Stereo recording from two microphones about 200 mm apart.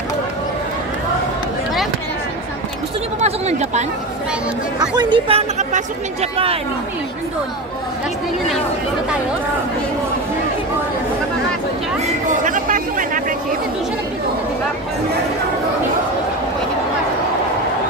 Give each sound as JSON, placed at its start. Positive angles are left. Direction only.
{"t": 3.2, "sound": "a sound", "side_deg": -35}
{"t": 4.7, "sound": "speech", "side_deg": -20}
{"t": 5.6, "sound": "speech", "side_deg": -40}
{"t": 12.4, "sound": "chatter", "side_deg": -40}